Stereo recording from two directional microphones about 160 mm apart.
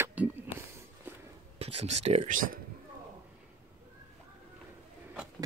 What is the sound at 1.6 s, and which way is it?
Speech, 40° right (ahead or behind).